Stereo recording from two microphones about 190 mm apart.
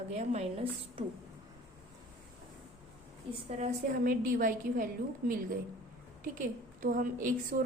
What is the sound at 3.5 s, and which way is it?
A woman's voice, 40° right (ahead or behind).